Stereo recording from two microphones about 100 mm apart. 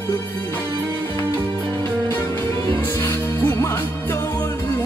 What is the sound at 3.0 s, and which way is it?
Music, 25° left (ahead or behind).